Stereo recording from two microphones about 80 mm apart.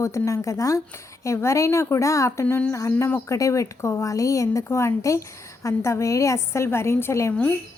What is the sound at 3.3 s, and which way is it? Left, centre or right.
A woman's voice, left.